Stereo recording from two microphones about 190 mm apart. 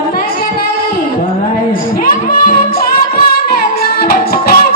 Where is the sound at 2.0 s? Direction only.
50° left (ahead or behind).